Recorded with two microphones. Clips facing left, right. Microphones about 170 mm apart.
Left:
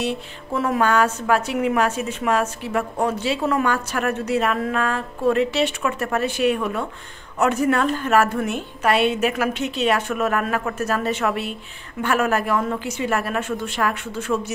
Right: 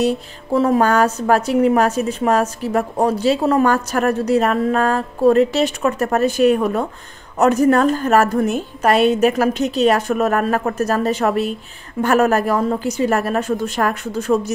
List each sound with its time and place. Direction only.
0.0 s a woman's voice: 40° right (ahead or behind)